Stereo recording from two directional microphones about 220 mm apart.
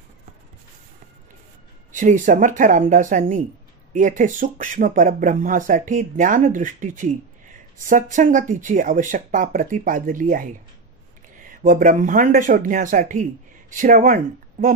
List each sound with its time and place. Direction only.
1.9 s speech: 35° right (ahead or behind)